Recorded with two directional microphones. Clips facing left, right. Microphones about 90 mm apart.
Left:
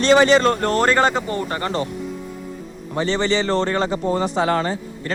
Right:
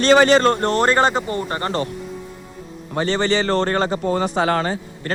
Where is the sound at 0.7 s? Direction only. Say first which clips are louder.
Even; 20° right (ahead or behind).